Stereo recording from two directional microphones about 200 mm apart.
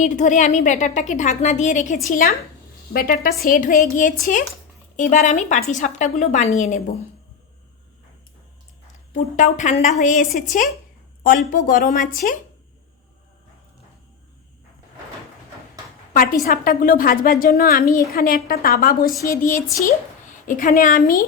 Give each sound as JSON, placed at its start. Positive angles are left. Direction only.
{"t": 0.0, "sound": "a woman's voice", "side_deg": 40}
{"t": 9.3, "sound": "a woman's voice", "side_deg": 35}
{"t": 11.5, "sound": "a woman's voice", "side_deg": 45}
{"t": 16.1, "sound": "a woman's voice", "side_deg": 45}